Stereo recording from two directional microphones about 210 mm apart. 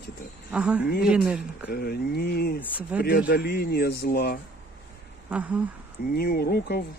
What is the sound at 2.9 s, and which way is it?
Speech, 5° right (ahead or behind).